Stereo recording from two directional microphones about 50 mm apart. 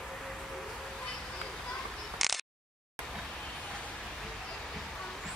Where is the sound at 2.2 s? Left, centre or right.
Centre.